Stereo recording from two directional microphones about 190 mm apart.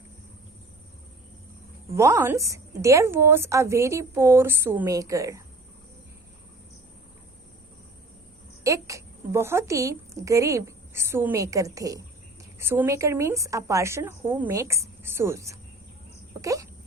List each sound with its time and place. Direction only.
2.0 s a woman's voice: 15° right (ahead or behind)
8.6 s a woman's voice: 15° right (ahead or behind)